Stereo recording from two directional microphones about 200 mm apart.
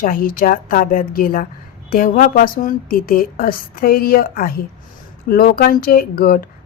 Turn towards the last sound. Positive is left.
turn(degrees=50)  # may be behind; listen again after turning